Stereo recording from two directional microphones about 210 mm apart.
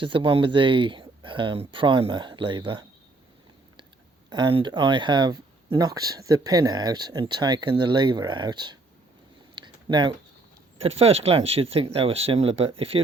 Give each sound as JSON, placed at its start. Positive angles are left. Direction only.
{"t": 0.0, "sound": "speech", "side_deg": -25}
{"t": 4.3, "sound": "speech", "side_deg": -20}
{"t": 9.6, "sound": "a sound", "side_deg": -20}
{"t": 10.8, "sound": "speech", "side_deg": -30}